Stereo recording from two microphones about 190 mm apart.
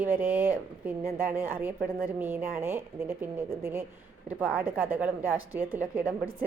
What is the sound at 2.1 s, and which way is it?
A woman's voice, 10° right (ahead or behind).